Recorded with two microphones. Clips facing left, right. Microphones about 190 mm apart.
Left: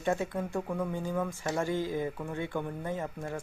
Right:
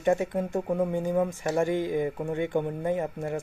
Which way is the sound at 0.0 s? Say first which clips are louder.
Right 6 dB; 15° right (ahead or behind).